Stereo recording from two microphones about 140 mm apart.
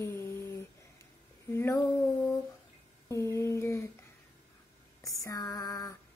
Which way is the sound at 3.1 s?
20° left (ahead or behind).